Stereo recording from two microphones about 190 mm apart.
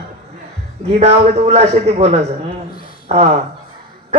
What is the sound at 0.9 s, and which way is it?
Speech, 35° right (ahead or behind).